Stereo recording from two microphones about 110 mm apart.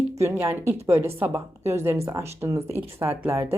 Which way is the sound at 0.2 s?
25° right (ahead or behind).